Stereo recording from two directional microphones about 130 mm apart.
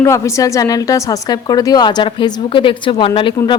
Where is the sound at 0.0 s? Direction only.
25° left (ahead or behind).